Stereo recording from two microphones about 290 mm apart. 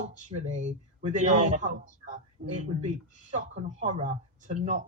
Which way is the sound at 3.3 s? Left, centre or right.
Right.